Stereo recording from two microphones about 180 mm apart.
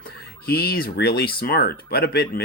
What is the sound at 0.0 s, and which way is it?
Speech, 60° left (ahead or behind).